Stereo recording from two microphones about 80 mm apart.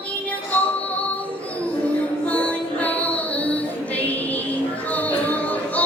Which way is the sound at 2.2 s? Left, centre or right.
Centre.